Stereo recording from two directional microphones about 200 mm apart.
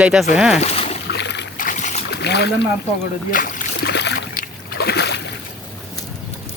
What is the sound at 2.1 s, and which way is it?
Boat, 55° left (ahead or behind).